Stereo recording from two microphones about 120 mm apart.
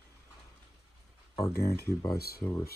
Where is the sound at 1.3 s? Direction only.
30° left (ahead or behind).